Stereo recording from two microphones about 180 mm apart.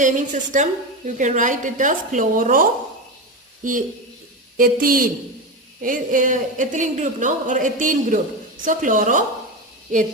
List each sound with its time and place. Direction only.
0.0 s a woman's voice: 45° right (ahead or behind)